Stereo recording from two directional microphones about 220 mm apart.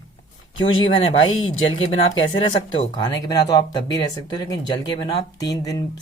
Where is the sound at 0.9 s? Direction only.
25° left (ahead or behind).